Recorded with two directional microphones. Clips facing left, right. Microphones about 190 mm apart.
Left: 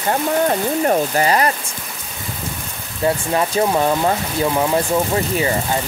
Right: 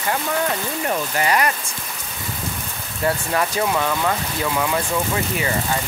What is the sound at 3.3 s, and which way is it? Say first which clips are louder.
Speech: left 5 dB; 30° left (ahead or behind).